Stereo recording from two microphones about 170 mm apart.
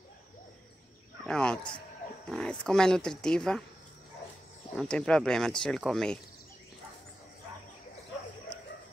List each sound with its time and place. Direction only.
1.2 s speech: 5° left (ahead or behind)
4.7 s speech: 5° left (ahead or behind)